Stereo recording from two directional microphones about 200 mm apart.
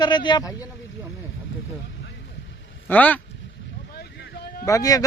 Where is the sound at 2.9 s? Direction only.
10° left (ahead or behind).